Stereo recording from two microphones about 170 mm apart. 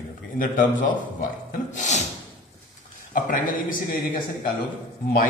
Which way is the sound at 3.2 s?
55° left (ahead or behind).